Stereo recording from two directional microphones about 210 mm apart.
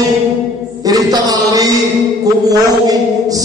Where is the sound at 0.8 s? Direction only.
15° right (ahead or behind).